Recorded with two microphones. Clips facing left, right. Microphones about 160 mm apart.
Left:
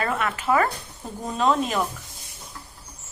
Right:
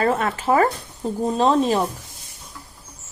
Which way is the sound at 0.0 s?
35° right (ahead or behind).